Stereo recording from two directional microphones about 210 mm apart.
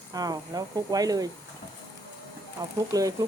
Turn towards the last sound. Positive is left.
turn(degrees=-15)  # may be behind; listen again after turning